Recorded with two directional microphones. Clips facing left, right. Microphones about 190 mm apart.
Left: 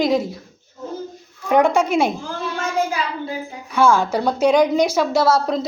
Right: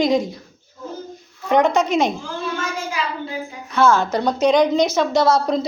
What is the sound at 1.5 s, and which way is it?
Speech, 10° left (ahead or behind).